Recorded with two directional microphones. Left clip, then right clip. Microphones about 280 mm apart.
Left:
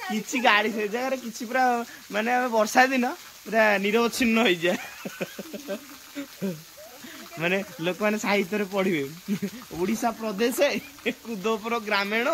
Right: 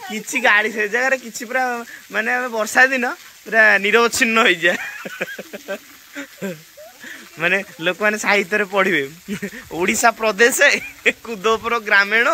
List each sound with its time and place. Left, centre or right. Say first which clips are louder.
0.1 s speech: right 6 dB; centre
7.3 s speech: right 8 dB; centre
9.8 s speech: right 11 dB; right
10.4 s speech: right 10 dB; centre